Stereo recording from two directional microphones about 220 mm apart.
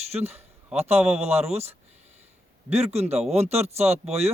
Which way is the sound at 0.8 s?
30° right (ahead or behind).